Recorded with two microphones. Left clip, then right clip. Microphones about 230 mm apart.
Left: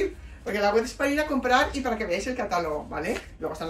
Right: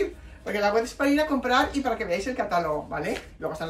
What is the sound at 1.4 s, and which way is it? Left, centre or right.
Speech, centre.